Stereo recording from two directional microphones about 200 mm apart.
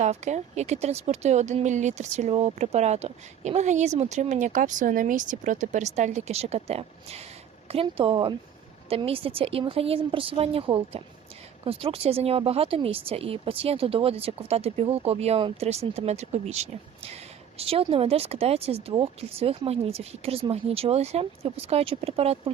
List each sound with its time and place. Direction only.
0.0 s speech: 35° right (ahead or behind)